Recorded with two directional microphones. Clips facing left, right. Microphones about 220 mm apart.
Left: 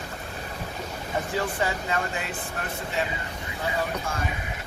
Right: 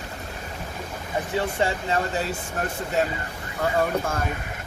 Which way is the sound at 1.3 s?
30° right (ahead or behind).